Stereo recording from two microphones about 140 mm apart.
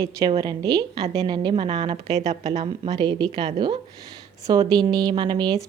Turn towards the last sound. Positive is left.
turn(degrees=-30)  # may be behind; listen again after turning